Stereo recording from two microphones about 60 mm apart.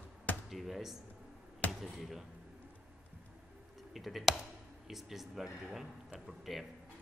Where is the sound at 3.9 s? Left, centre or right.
Centre.